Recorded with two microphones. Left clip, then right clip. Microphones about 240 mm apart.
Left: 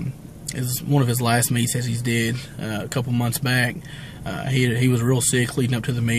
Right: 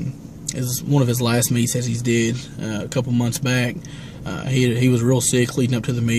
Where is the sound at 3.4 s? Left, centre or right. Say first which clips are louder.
Even; centre.